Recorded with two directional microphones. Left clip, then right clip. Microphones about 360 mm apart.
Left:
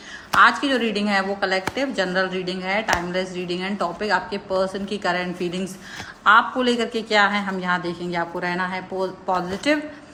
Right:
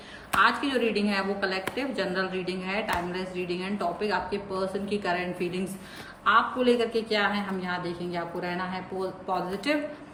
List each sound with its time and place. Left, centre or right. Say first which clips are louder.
0.3 s a woman's voice: left 7 dB; centre